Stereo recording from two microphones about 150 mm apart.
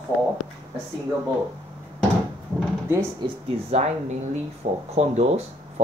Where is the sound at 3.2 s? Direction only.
30° right (ahead or behind).